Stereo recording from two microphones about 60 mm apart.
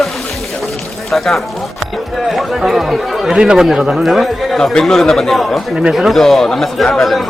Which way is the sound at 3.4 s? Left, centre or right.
Centre.